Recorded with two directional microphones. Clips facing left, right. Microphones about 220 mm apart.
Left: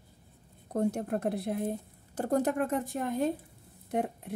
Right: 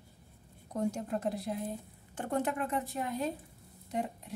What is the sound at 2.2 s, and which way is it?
Speech, 40° left (ahead or behind).